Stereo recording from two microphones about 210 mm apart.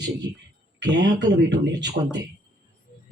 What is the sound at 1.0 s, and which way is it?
Speech, 55° right (ahead or behind).